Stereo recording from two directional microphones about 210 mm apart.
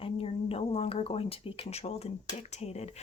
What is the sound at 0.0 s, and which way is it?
Speech, 25° left (ahead or behind).